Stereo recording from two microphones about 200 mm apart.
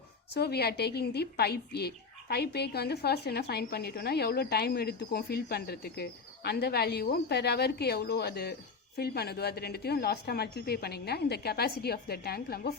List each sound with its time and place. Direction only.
0.3 s speech: 55° left (ahead or behind)